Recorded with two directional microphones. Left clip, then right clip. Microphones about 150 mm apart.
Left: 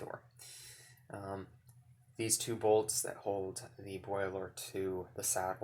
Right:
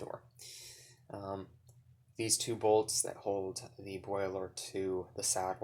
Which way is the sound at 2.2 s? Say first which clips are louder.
Right 2 dB; 15° right (ahead or behind).